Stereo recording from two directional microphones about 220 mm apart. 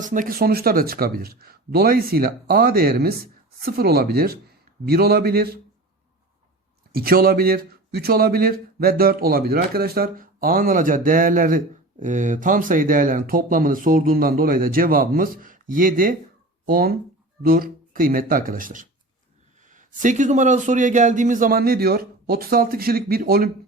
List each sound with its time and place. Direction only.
0.0 s speech: 35° right (ahead or behind)
6.9 s speech: 40° right (ahead or behind)